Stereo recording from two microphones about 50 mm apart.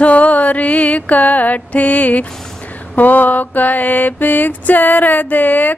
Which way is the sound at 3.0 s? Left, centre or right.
Left.